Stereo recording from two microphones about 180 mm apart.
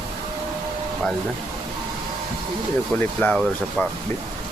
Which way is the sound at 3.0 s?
5° left (ahead or behind).